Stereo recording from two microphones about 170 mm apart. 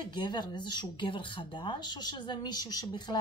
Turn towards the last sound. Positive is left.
turn(degrees=25)  # may be behind; listen again after turning